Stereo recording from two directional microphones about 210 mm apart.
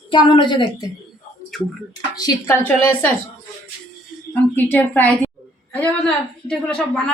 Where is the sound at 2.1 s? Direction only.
20° left (ahead or behind).